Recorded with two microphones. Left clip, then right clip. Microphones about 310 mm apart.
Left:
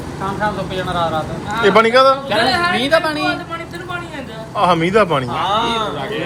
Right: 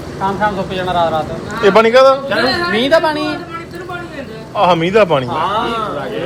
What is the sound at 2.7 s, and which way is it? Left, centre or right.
Speech, right.